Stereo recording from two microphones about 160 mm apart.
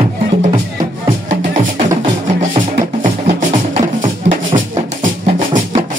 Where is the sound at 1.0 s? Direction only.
50° right (ahead or behind).